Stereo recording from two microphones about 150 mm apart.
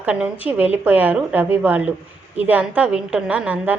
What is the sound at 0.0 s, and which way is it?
A woman's voice, 10° right (ahead or behind).